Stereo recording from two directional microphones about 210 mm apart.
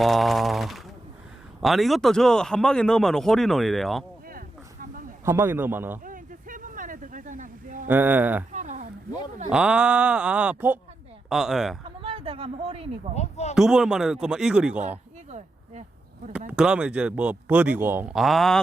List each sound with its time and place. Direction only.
0.0 s a man's voice: centre (ahead or behind)
4.3 s a sound: 40° right (ahead or behind)
5.2 s a man's voice: 10° right (ahead or behind)
6.1 s a sound: 40° right (ahead or behind)
7.9 s a man's voice: 10° right (ahead or behind)
8.5 s a sound: 35° right (ahead or behind)
9.5 s a man's voice: 5° right (ahead or behind)
11.9 s speech: 25° right (ahead or behind)
13.1 s speech: 30° left (ahead or behind)
13.6 s a man's voice: centre (ahead or behind)
14.8 s a sound: 35° right (ahead or behind)
16.5 s a man's voice: 5° right (ahead or behind)